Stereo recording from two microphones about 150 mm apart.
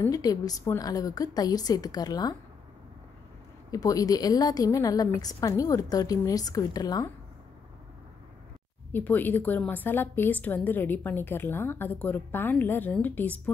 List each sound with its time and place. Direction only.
0.0 s a woman's voice: 25° left (ahead or behind)
3.7 s a woman's voice: 25° left (ahead or behind)
8.9 s a woman's voice: 10° left (ahead or behind)